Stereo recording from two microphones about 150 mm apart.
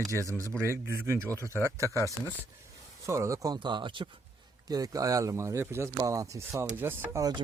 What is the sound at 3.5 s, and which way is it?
Speech, 30° right (ahead or behind).